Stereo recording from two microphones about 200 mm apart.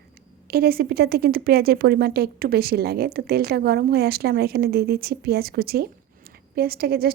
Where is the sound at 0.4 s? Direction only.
50° right (ahead or behind).